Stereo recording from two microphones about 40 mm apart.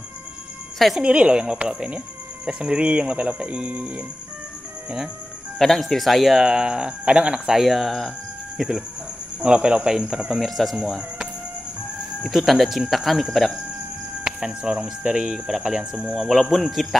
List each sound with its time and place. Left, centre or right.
1.0 s speech: right
5.6 s speech: centre
6.4 s speech: right
7.6 s speech: centre
9.4 s speech: right
10.3 s speech: centre
12.2 s speech: centre
14.2 s speech: right
16.1 s speech: centre